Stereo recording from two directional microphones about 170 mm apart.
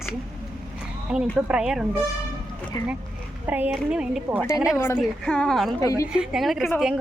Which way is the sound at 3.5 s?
10° right (ahead or behind).